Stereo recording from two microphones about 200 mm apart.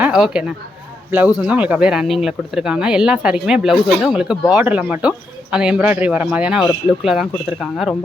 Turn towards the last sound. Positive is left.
turn(degrees=0)  # may be behind; listen again after turning